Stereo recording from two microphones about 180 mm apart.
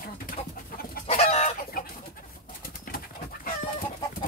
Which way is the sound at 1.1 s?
35° left (ahead or behind).